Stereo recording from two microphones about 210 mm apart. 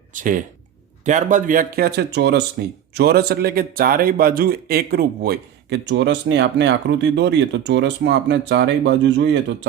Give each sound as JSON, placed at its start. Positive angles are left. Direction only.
{"t": 0.1, "sound": "a man's voice", "side_deg": -40}